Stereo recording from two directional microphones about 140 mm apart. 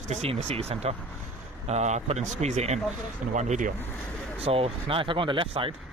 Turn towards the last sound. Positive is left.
turn(degrees=-40)  # may be behind; listen again after turning